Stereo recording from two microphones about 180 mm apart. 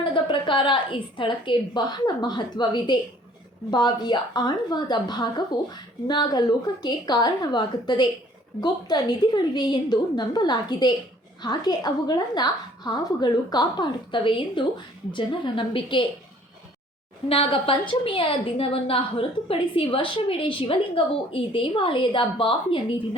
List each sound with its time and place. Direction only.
0.1 s a woman's voice: 25° left (ahead or behind)
17.2 s a woman's voice: 30° left (ahead or behind)